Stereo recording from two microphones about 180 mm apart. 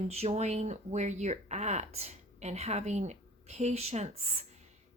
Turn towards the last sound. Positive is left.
turn(degrees=-35)  # may be behind; listen again after turning